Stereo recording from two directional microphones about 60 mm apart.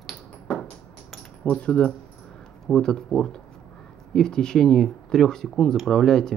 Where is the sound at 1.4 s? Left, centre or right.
Centre.